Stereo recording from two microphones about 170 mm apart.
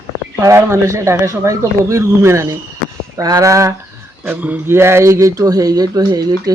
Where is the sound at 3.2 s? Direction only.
20° right (ahead or behind).